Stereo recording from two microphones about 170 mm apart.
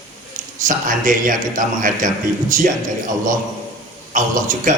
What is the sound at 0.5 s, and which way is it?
A man's voice, 50° right (ahead or behind).